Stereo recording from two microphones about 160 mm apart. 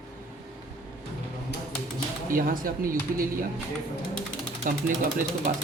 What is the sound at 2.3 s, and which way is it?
Speech, 60° right (ahead or behind).